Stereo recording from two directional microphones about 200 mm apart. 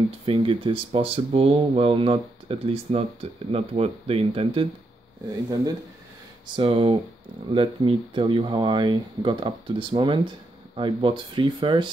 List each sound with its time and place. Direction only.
0.2 s speech: 30° right (ahead or behind)
6.4 s speech: 25° right (ahead or behind)